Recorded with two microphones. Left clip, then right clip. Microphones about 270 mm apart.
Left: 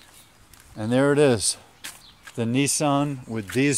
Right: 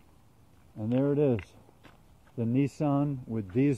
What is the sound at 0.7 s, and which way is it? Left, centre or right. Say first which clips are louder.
Speech: left 8 dB; left.